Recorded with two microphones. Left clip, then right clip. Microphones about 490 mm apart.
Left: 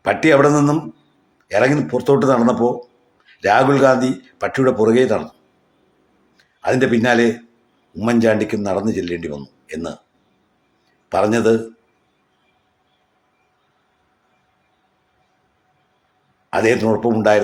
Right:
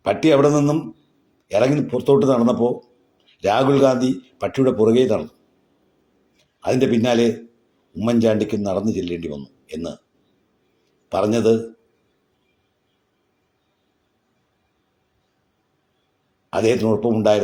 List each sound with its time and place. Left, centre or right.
0.0 s a man's voice: right
6.3 s a man's voice: right
11.1 s a man's voice: right
16.5 s a man's voice: right